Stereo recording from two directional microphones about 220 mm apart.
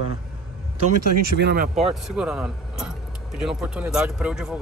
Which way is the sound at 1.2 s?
45° right (ahead or behind).